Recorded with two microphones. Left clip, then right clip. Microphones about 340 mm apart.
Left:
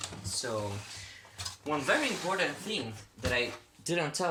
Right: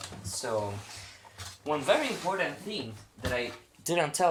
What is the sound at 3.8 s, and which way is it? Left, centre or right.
Speech, centre.